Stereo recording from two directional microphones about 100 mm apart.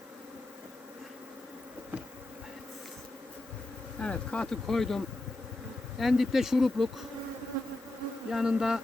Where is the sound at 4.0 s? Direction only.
10° left (ahead or behind).